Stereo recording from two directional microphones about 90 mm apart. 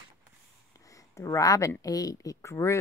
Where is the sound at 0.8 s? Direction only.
40° left (ahead or behind).